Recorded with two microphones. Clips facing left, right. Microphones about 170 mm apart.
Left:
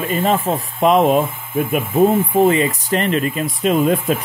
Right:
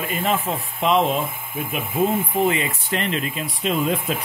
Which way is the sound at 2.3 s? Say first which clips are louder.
Left 7 dB; 40° left (ahead or behind).